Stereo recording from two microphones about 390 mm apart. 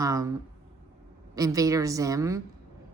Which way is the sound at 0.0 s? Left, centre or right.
Centre.